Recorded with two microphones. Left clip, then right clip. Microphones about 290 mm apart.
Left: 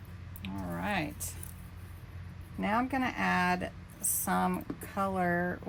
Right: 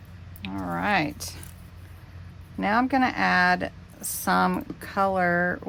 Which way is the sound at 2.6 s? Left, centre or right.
Right.